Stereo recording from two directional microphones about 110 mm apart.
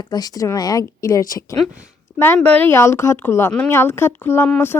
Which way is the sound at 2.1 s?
20° left (ahead or behind).